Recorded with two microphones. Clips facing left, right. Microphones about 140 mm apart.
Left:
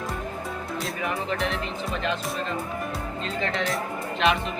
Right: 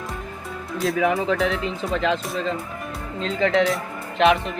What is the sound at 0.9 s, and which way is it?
Speech, 90° right.